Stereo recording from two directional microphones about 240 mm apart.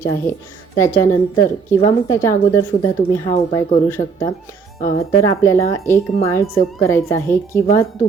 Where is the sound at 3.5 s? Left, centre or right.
Centre.